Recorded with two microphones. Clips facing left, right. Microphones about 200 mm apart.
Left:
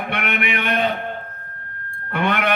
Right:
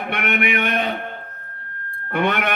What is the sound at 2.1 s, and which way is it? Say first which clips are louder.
Speech: even; 55° right (ahead or behind).